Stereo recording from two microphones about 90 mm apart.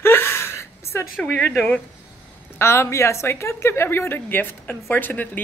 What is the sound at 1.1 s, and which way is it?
Speech, 15° left (ahead or behind).